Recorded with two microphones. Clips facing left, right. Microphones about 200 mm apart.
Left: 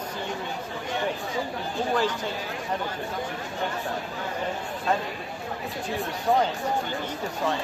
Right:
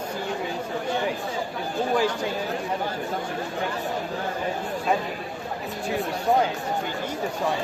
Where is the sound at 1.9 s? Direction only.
10° right (ahead or behind).